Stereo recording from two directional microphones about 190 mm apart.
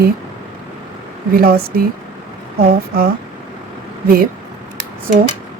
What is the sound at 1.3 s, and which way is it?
A woman's voice, 55° right (ahead or behind).